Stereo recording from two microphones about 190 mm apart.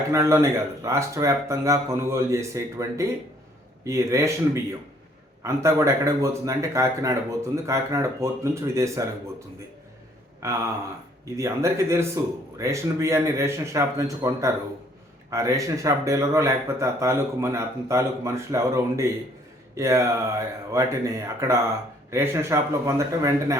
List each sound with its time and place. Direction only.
0.1 s speech: 15° right (ahead or behind)
10.4 s speech: 15° right (ahead or behind)